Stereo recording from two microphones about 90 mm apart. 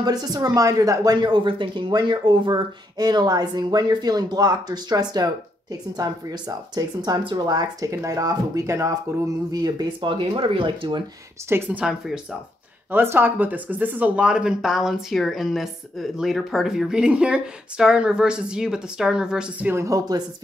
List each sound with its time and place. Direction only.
0.0 s speech: 45° right (ahead or behind)
7.9 s speech: 35° right (ahead or behind)
9.5 s speech: 50° right (ahead or behind)
9.9 s speech: 70° right (ahead or behind)
11.4 s speech: 25° right (ahead or behind)
11.7 s speech: 5° right (ahead or behind)
12.9 s speech: 25° right (ahead or behind)
19.7 s speech: 35° right (ahead or behind)